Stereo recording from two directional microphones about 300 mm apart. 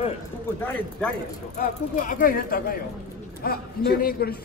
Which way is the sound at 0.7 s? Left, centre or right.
Centre.